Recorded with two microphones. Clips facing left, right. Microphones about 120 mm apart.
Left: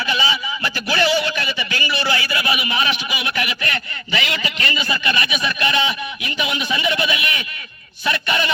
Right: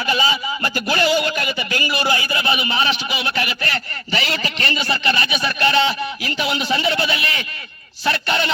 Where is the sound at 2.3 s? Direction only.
30° right (ahead or behind).